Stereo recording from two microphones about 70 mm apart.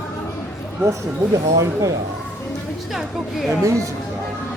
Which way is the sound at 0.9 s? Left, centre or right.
Right.